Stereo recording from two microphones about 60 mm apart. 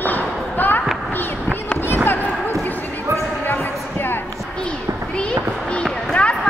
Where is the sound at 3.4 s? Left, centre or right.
Left.